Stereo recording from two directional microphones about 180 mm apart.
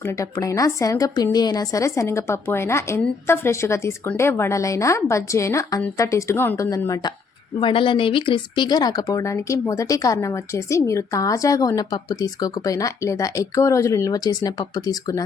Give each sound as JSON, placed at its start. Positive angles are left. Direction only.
{"t": 0.0, "sound": "speech", "side_deg": 15}